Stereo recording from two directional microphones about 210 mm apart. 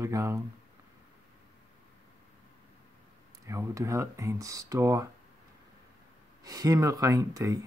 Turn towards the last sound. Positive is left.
turn(degrees=-15)  # may be behind; listen again after turning